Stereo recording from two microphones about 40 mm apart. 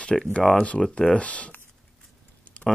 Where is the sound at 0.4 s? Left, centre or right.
Centre.